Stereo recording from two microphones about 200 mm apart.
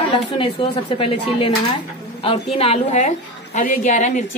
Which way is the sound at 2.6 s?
30° left (ahead or behind).